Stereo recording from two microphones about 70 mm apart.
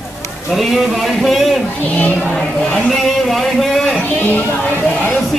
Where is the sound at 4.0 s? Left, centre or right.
Left.